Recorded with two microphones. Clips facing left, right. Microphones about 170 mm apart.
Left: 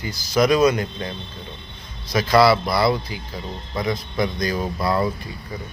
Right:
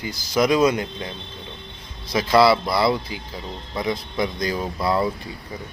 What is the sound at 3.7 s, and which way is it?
Speech, 25° right (ahead or behind).